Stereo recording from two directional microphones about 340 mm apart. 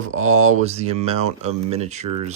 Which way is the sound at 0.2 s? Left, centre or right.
Centre.